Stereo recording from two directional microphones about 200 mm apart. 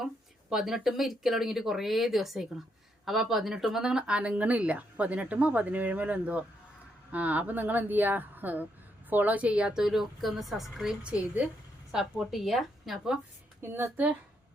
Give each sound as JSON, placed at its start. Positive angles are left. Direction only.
{"t": 0.5, "sound": "a woman's voice", "side_deg": 0}
{"t": 13.6, "sound": "speech", "side_deg": -10}